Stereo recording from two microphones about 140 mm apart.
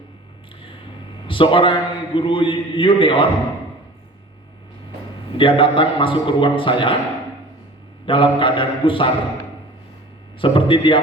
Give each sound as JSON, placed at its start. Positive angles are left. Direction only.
{"t": 1.3, "sound": "a man's voice", "side_deg": 35}
{"t": 5.4, "sound": "a man's voice", "side_deg": 40}
{"t": 8.0, "sound": "a man's voice", "side_deg": 40}
{"t": 10.4, "sound": "a man's voice", "side_deg": 35}